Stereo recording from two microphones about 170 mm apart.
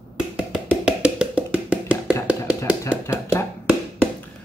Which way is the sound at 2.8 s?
15° left (ahead or behind).